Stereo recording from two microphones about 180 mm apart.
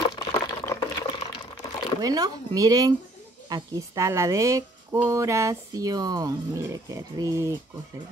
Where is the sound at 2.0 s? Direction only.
20° right (ahead or behind).